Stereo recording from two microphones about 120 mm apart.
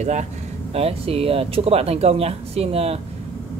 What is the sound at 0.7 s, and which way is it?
Speech, 55° right (ahead or behind).